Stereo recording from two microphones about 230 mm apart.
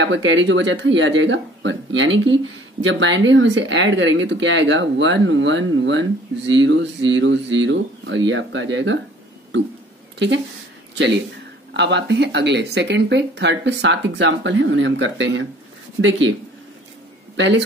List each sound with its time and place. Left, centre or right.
0.0 s speech: right
10.1 s speech: right
11.7 s speech: right
17.4 s speech: right